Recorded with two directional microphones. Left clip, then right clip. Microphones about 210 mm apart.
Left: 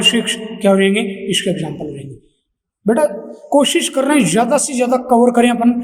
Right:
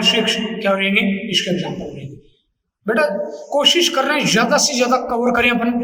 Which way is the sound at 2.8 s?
35° left (ahead or behind).